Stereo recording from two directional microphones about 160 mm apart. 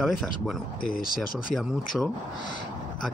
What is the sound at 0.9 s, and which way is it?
Speech, 60° left (ahead or behind).